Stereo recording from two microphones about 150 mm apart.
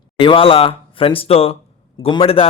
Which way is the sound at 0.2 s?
35° left (ahead or behind).